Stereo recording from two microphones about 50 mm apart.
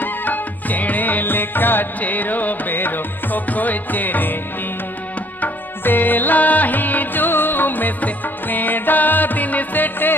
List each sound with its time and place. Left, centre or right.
0.0 s music: left
5.4 s music: left